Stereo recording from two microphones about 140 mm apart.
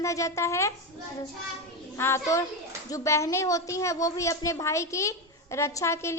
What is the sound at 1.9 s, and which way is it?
A child's voice, 20° left (ahead or behind).